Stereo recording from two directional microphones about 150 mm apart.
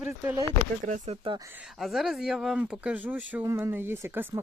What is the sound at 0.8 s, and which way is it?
Speech, 55° right (ahead or behind).